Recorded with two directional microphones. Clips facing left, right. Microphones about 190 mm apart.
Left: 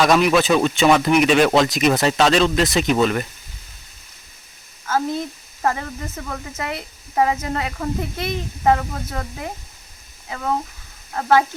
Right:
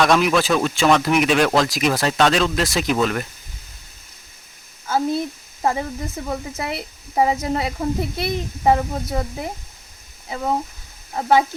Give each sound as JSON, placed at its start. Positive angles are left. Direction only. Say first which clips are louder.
{"t": 0.0, "sound": "speech", "louder": "left 1 dB", "side_deg": 0}
{"t": 4.9, "sound": "speech", "louder": "right 1 dB", "side_deg": -10}